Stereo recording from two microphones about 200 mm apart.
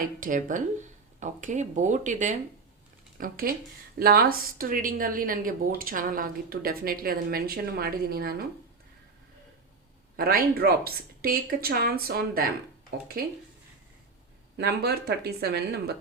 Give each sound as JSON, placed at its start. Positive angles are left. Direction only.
{"t": 0.0, "sound": "a woman's voice", "side_deg": -40}
{"t": 10.2, "sound": "a woman's voice", "side_deg": -50}
{"t": 14.5, "sound": "speech", "side_deg": -55}